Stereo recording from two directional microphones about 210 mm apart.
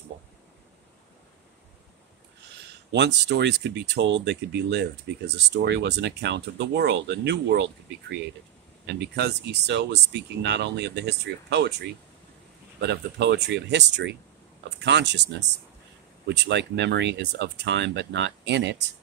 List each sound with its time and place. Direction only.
2.9 s speech: 55° right (ahead or behind)
8.8 s speech: 50° right (ahead or behind)